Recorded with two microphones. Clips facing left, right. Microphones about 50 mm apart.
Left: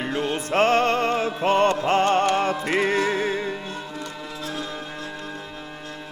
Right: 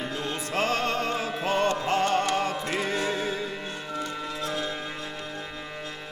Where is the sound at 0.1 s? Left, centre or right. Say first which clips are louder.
Left 6 dB; left.